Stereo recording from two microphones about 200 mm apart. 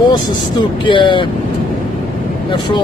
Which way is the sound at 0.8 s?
25° left (ahead or behind).